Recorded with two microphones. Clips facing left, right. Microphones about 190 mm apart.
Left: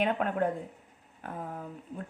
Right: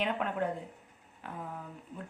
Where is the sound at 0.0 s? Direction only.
50° left (ahead or behind).